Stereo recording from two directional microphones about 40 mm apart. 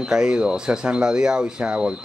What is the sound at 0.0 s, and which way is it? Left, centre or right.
Speech, centre.